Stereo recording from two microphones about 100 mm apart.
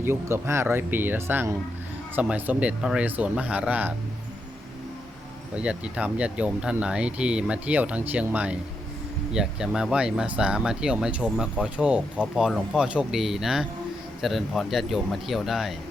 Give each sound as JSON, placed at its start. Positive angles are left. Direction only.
{"t": 0.0, "sound": "speech", "side_deg": -25}
{"t": 5.5, "sound": "speech", "side_deg": -10}